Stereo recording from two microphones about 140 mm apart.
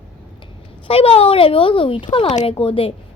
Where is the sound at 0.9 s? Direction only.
40° left (ahead or behind).